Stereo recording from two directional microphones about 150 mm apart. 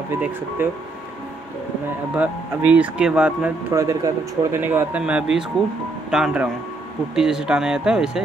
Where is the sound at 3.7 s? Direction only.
20° right (ahead or behind).